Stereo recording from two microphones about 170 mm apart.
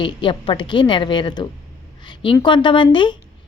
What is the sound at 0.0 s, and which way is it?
Speech, 30° left (ahead or behind).